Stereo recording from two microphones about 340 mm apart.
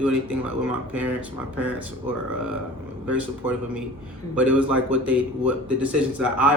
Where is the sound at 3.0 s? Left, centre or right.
Left.